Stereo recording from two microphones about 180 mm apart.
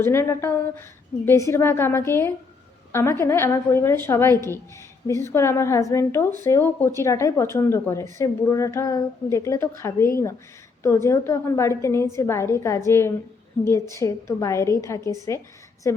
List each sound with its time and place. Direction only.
0.0 s a woman's voice: 15° left (ahead or behind)